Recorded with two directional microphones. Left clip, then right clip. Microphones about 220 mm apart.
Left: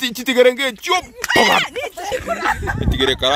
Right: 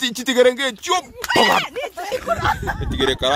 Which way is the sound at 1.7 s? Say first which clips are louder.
Left 1 dB; 35° left (ahead or behind).